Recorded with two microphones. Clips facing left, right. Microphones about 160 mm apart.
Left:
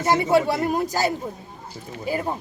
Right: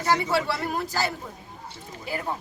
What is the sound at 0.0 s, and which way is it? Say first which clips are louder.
Speech: left 5 dB; 50° left (ahead or behind).